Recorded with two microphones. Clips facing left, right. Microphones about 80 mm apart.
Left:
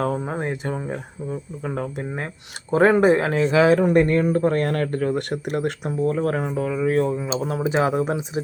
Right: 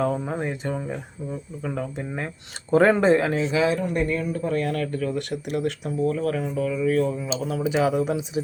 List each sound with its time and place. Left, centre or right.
0.1 s speech: left
2.6 s speech: centre
3.3 s speech: left